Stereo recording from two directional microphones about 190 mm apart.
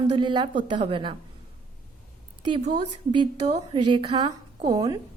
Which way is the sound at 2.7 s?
25° right (ahead or behind).